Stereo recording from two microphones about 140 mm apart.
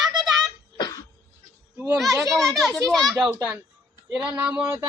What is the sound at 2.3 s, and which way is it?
A child's voice, 5° left (ahead or behind).